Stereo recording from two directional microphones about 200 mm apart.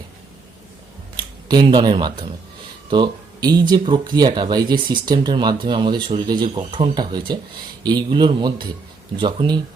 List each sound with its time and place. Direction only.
1.1 s speech: 20° right (ahead or behind)